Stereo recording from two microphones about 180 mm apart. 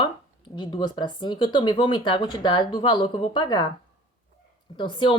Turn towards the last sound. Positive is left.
turn(degrees=25)  # may be behind; listen again after turning